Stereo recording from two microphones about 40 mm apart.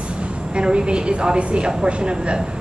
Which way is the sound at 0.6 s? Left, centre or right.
Right.